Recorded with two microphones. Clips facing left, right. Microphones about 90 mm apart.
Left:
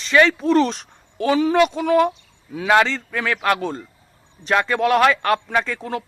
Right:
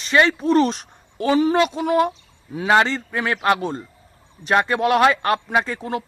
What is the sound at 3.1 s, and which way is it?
Speech, 20° right (ahead or behind).